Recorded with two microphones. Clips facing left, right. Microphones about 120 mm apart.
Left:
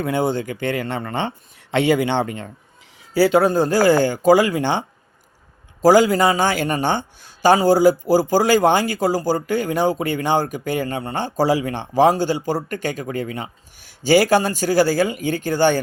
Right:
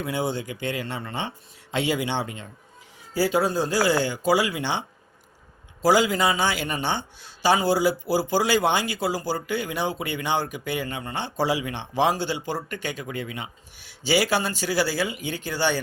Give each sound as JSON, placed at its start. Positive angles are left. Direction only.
{"t": 0.0, "sound": "a man's voice", "side_deg": 55}